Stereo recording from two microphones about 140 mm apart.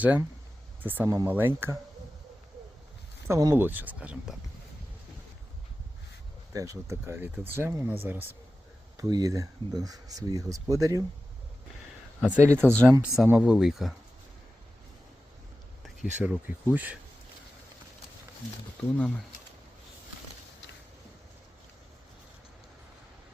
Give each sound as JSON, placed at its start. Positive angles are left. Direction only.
{"t": 0.0, "sound": "speech", "side_deg": -10}
{"t": 3.2, "sound": "speech", "side_deg": -20}
{"t": 6.5, "sound": "speech", "side_deg": -25}
{"t": 9.0, "sound": "speech", "side_deg": -25}
{"t": 12.2, "sound": "speech", "side_deg": -10}
{"t": 13.4, "sound": "speech", "side_deg": -5}
{"t": 16.2, "sound": "speech", "side_deg": -10}
{"t": 18.9, "sound": "speech", "side_deg": 5}